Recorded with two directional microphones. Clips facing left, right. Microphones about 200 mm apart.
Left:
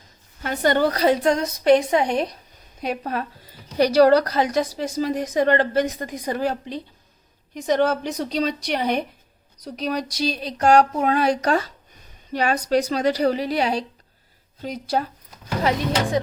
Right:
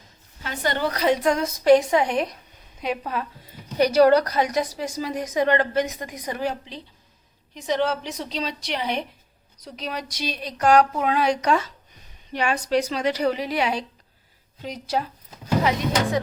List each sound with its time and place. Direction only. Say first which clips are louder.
0.4 s a woman's voice: left 6 dB; 50° left (ahead or behind)
0.9 s a woman's voice: left 2 dB; 30° left (ahead or behind)
2.0 s a woman's voice: left 2 dB; 40° left (ahead or behind)
3.8 s a woman's voice: left 1 dB; 35° left (ahead or behind)
7.5 s a woman's voice: left 4 dB; 50° left (ahead or behind); by 10.8 s 30° left (ahead or behind)
10.9 s a woman's voice: left 2 dB; 45° left (ahead or behind)
14.6 s a woman's voice: left 2 dB; 50° left (ahead or behind)